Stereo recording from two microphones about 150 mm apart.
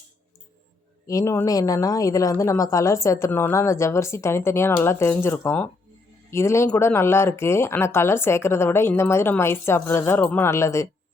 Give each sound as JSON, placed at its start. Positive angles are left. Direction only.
{"t": 1.0, "sound": "speech", "side_deg": 20}